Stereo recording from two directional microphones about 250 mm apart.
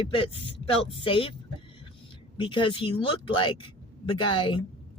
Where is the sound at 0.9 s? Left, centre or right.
Left.